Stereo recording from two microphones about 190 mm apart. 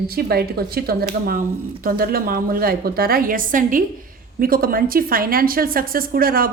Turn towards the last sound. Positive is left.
turn(degrees=-50)  # may be behind; listen again after turning